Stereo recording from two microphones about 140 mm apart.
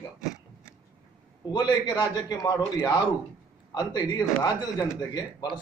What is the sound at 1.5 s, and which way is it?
A man's voice, 30° left (ahead or behind).